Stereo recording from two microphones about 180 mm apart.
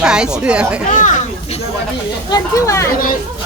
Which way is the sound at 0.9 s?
45° left (ahead or behind).